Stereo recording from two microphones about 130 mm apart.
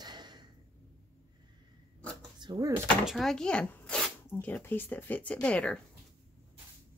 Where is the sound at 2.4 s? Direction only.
30° right (ahead or behind).